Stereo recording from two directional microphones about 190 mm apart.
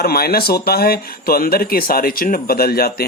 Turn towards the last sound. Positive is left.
turn(degrees=55)  # may be behind; listen again after turning